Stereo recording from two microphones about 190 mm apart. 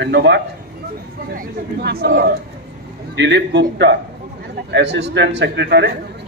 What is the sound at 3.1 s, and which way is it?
A man's voice, 70° right (ahead or behind).